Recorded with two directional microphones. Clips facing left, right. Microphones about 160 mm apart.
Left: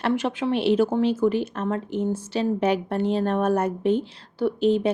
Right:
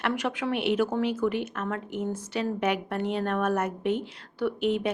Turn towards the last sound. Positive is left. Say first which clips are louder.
# left 5 dB
turn(degrees=30)  # may be behind; listen again after turning